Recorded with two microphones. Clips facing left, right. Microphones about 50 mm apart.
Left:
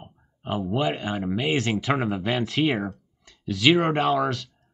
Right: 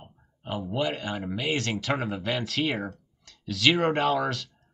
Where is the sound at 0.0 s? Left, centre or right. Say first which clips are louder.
Left 5 dB; centre.